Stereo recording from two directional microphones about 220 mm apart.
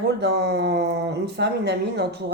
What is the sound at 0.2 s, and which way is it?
A woman's voice, 50° right (ahead or behind).